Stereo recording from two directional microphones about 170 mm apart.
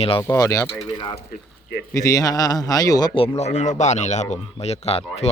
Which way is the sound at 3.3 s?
40° left (ahead or behind).